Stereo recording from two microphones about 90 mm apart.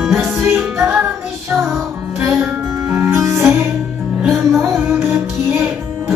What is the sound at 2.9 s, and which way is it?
Music, 35° right (ahead or behind).